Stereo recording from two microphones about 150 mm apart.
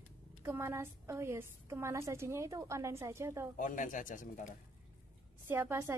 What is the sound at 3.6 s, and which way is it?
Speech, 60° left (ahead or behind).